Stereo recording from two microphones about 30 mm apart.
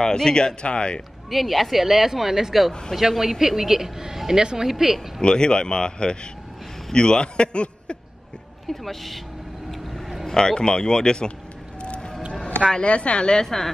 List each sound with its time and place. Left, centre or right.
0.0 s a man's voice: left
1.3 s speech: centre
3.0 s speech: centre
4.4 s speech: right
4.6 s speech: centre
5.2 s a man's voice: left
8.6 s speech: centre
9.7 s vehicle: centre
10.2 s a man's voice: left
11.8 s music: left
12.6 s a man's voice: left
12.9 s a man's voice: left